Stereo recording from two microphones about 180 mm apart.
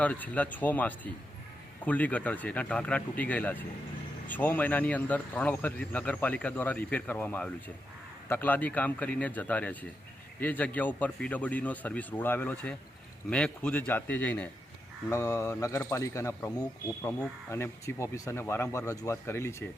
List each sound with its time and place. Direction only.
0.0 s a man's voice: 10° left (ahead or behind)